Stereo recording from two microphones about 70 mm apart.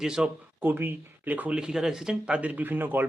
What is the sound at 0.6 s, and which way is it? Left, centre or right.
Speech, right.